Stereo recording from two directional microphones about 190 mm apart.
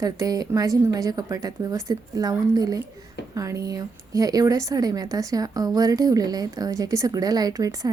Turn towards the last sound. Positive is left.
turn(degrees=-20)  # may be behind; listen again after turning